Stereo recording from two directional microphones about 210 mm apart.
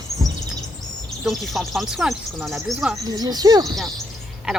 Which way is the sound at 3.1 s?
20° right (ahead or behind).